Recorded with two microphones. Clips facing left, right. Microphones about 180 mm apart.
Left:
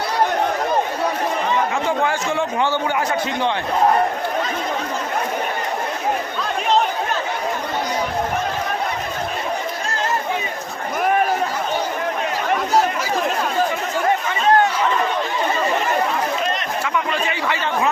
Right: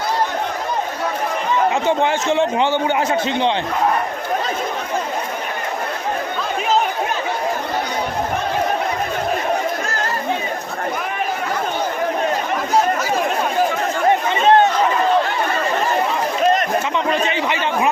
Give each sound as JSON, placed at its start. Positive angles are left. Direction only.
{"t": 2.0, "sound": "a man's voice", "side_deg": -20}
{"t": 14.4, "sound": "chatter", "side_deg": -25}